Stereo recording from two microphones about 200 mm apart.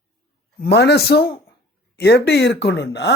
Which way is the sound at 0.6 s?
55° left (ahead or behind).